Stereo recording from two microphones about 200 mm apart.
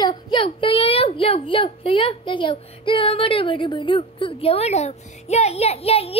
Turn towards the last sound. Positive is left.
turn(degrees=30)  # may be behind; listen again after turning